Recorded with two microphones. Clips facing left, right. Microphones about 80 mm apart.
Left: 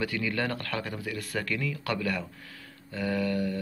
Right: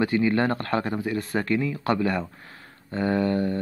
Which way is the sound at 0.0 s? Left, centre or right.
Right.